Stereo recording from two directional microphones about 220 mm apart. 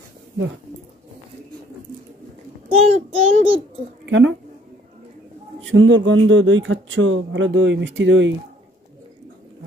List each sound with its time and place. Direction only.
2.7 s child singing: 25° right (ahead or behind)
4.0 s a sound: 55° right (ahead or behind)
5.6 s speech: 60° right (ahead or behind)